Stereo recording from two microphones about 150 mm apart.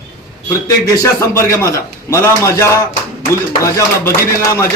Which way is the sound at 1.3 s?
20° left (ahead or behind).